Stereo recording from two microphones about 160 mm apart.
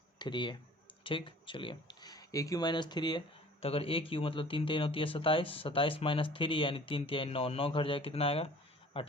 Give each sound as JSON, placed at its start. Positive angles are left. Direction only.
{"t": 0.2, "sound": "speech", "side_deg": 30}